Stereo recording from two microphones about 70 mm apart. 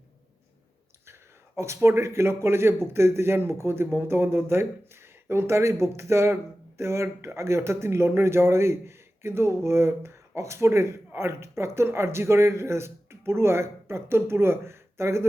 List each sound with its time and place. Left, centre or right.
1.0 s a man's voice: right